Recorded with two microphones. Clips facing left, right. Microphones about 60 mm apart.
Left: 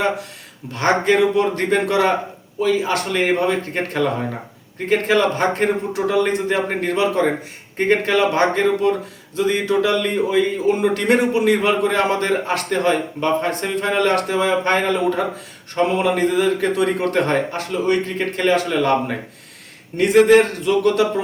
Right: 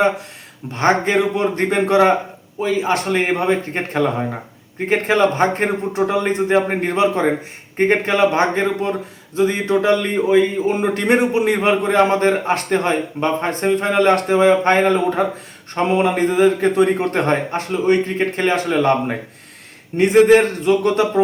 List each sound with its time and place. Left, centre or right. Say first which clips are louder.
0.7 s speech: right 1 dB; right